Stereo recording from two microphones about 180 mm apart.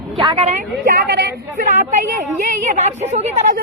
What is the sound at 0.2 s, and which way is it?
Speech, 30° right (ahead or behind).